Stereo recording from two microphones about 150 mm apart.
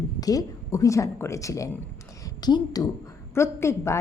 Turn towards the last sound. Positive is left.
turn(degrees=20)  # may be behind; listen again after turning